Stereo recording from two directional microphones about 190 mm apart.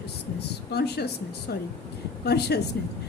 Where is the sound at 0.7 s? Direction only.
60° left (ahead or behind).